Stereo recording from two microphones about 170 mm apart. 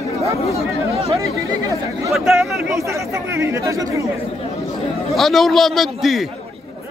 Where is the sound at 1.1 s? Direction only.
20° right (ahead or behind).